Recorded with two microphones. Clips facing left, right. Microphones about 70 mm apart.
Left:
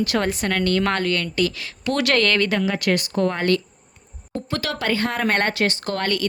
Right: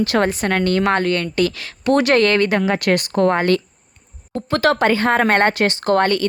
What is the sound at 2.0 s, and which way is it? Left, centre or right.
Speech, right.